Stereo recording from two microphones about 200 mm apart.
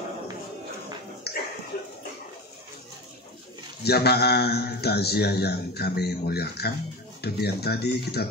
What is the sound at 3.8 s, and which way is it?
A man's voice, 55° left (ahead or behind).